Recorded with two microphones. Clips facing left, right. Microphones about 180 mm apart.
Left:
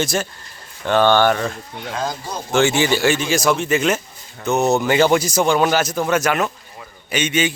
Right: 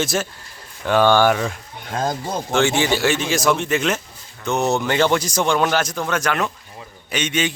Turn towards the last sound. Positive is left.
turn(degrees=0)  # may be behind; listen again after turning